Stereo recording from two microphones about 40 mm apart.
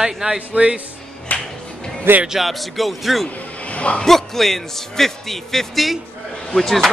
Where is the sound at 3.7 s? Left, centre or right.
Left.